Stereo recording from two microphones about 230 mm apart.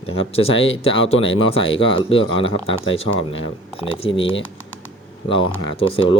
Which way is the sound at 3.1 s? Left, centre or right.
Left.